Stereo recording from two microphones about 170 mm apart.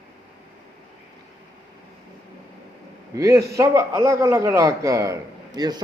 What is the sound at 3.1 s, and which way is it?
A man's voice, 20° right (ahead or behind).